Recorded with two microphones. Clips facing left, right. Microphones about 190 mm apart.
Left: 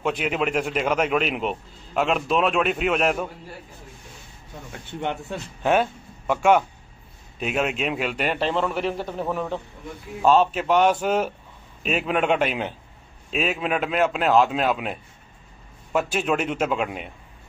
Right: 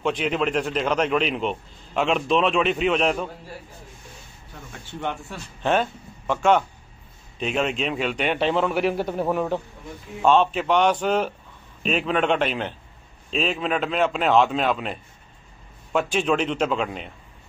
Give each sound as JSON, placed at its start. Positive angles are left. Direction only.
{"t": 0.0, "sound": "a man's voice", "side_deg": 10}
{"t": 5.0, "sound": "speech", "side_deg": 20}
{"t": 5.6, "sound": "a man's voice", "side_deg": 10}
{"t": 10.2, "sound": "a man's voice", "side_deg": 5}